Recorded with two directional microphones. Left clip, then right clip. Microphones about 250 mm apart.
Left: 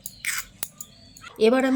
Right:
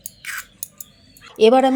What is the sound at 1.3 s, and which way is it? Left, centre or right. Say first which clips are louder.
Speech: right 7 dB; centre.